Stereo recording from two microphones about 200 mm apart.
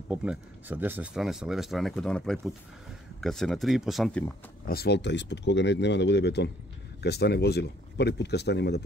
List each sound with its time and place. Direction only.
0.1 s speech: 5° right (ahead or behind)
4.6 s speech: 55° left (ahead or behind)